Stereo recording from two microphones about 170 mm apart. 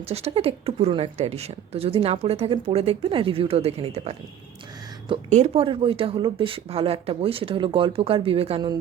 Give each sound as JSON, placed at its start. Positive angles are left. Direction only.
{"t": 0.1, "sound": "speech", "side_deg": -35}
{"t": 5.3, "sound": "speech", "side_deg": -40}